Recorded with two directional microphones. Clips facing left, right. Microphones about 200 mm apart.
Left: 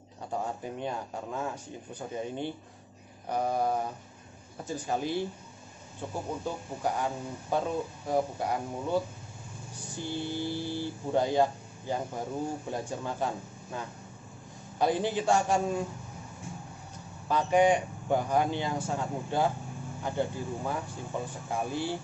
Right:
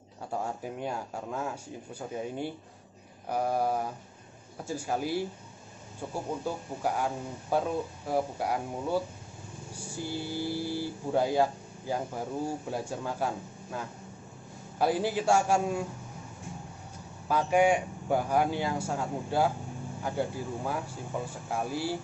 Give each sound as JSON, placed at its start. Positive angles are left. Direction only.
{"t": 0.3, "sound": "speech", "side_deg": -5}
{"t": 17.3, "sound": "speech", "side_deg": -10}